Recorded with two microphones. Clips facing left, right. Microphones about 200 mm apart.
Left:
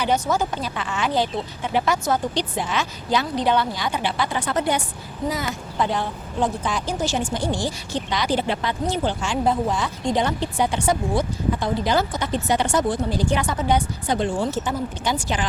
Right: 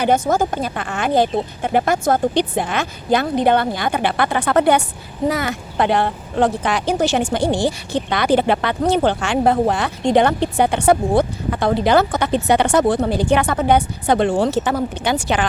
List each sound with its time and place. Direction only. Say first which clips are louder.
0.0 s speech: right 5 dB; 50° right (ahead or behind)